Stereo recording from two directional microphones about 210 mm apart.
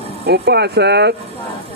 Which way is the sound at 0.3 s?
50° right (ahead or behind).